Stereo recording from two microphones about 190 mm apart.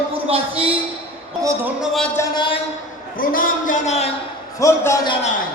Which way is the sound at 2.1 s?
20° left (ahead or behind).